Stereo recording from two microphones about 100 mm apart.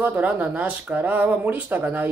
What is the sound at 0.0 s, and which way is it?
Speech, 15° right (ahead or behind).